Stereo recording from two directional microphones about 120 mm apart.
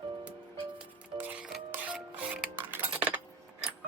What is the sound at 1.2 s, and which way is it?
Music, 15° right (ahead or behind).